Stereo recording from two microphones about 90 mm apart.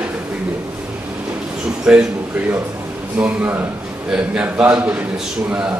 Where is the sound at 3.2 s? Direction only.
20° right (ahead or behind).